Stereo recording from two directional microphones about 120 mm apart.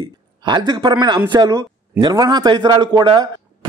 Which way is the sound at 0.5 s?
40° right (ahead or behind).